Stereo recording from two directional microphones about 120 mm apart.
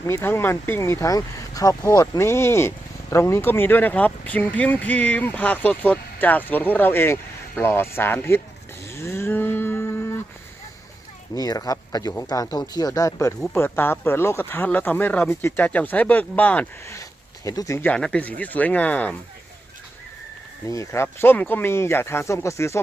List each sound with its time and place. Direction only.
0.0 s speech: 20° left (ahead or behind)
8.9 s livestock: 20° left (ahead or behind)
11.3 s speech: 30° left (ahead or behind); by 16.6 s 10° left (ahead or behind)
16.8 s a sound: 25° left (ahead or behind)
17.7 s speech: 10° left (ahead or behind)
20.7 s speech: 25° left (ahead or behind)